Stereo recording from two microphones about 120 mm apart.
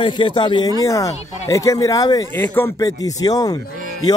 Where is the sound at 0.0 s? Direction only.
40° left (ahead or behind).